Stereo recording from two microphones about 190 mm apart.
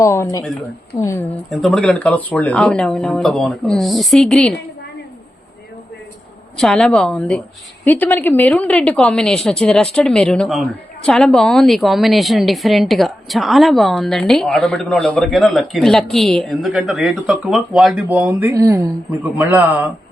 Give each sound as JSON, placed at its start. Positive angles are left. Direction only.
{"t": 0.0, "sound": "speech", "side_deg": 15}
{"t": 1.5, "sound": "a woman's voice", "side_deg": 0}
{"t": 6.6, "sound": "a woman's voice", "side_deg": 5}